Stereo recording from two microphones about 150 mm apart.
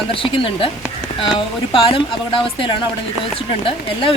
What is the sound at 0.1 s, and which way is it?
Speech, 35° left (ahead or behind).